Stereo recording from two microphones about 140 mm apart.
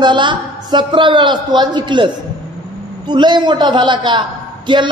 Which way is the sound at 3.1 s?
30° right (ahead or behind).